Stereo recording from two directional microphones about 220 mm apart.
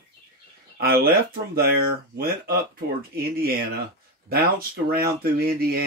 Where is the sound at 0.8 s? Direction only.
45° right (ahead or behind).